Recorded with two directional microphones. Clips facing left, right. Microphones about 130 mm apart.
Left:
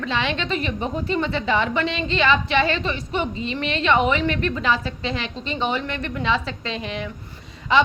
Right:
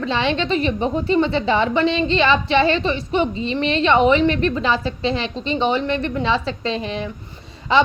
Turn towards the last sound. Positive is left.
turn(degrees=-30)  # may be behind; listen again after turning